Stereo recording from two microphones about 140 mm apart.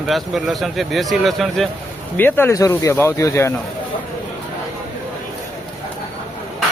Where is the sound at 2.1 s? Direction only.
15° left (ahead or behind).